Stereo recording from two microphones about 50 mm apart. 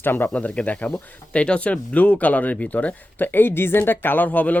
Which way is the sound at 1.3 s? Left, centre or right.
Left.